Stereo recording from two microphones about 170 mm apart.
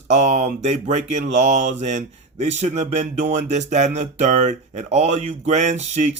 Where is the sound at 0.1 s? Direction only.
45° right (ahead or behind).